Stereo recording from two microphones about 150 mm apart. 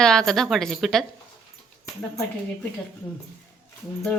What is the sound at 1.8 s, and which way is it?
Speech, 20° left (ahead or behind).